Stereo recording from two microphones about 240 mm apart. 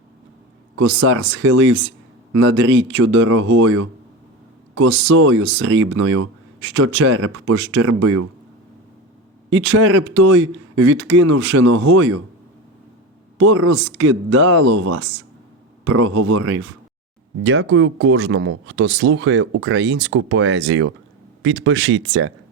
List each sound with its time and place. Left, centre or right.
0.8 s speech: right
9.5 s speech: right
13.7 s speech: right